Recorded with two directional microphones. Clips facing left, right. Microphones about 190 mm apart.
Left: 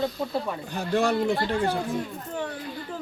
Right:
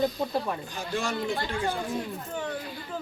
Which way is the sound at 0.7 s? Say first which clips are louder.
Left 11 dB; 65° left (ahead or behind).